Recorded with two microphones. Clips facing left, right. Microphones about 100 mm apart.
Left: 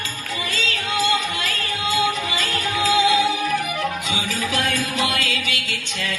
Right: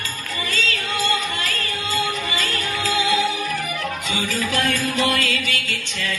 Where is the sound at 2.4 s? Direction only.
45° left (ahead or behind).